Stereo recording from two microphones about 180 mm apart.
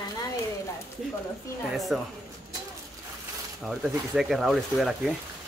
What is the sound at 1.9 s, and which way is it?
Speech, 5° right (ahead or behind).